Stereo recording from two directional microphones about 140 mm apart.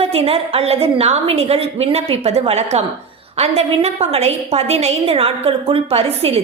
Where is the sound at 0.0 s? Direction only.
45° right (ahead or behind).